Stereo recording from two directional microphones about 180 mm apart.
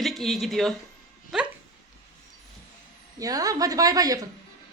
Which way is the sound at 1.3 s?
Centre (ahead or behind).